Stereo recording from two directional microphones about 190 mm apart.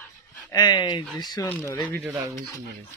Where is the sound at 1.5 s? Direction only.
10° left (ahead or behind).